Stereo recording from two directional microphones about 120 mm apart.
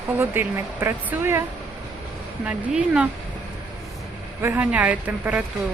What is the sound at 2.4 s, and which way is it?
Speech, 10° right (ahead or behind).